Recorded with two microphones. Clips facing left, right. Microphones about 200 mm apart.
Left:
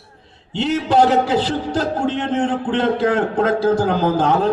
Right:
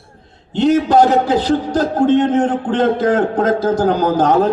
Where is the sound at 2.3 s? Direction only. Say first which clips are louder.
Right 4 dB; 40° right (ahead or behind).